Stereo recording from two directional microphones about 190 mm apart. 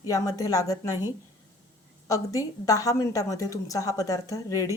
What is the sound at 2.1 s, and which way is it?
Speech, 20° left (ahead or behind).